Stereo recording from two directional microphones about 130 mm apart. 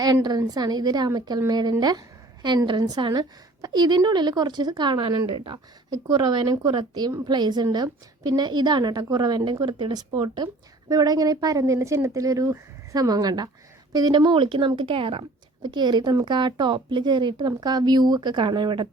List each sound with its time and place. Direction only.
0.0 s a woman's voice: 30° right (ahead or behind)